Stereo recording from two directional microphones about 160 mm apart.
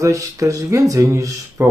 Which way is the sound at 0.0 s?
20° right (ahead or behind).